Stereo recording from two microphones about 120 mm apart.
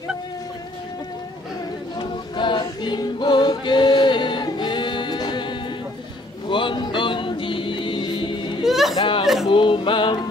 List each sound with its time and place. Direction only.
2.0 s choir: 40° left (ahead or behind)
6.5 s music: 40° left (ahead or behind)
8.6 s a sound: centre (ahead or behind)
9.5 s male singing: 45° left (ahead or behind)